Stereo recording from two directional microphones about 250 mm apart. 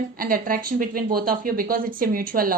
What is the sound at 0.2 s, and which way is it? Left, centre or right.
A woman's voice, right.